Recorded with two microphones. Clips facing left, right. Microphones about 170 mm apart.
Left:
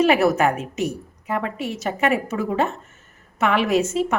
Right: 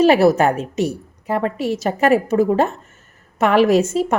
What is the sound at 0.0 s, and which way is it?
A woman's voice, 35° right (ahead or behind).